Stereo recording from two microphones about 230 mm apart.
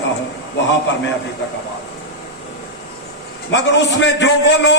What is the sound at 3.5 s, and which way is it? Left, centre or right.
A man's voice, left.